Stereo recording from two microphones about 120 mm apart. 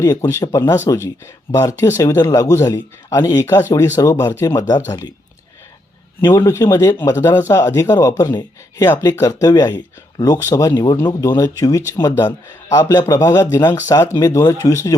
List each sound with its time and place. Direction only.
0.0 s speech: 30° left (ahead or behind)
6.1 s speech: 20° left (ahead or behind)
10.7 s speech: 35° left (ahead or behind)
12.7 s speech: 35° left (ahead or behind)